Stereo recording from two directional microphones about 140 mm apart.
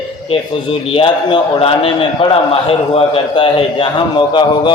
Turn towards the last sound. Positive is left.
turn(degrees=35)  # may be behind; listen again after turning